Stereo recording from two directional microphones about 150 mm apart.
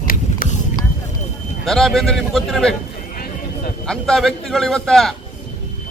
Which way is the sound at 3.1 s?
80° left.